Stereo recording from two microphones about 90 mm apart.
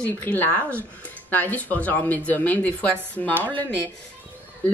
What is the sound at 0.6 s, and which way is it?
Speech, 25° right (ahead or behind).